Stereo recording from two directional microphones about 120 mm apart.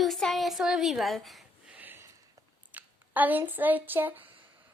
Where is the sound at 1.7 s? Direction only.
15° right (ahead or behind).